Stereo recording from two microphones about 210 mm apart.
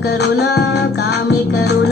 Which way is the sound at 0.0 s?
50° left (ahead or behind).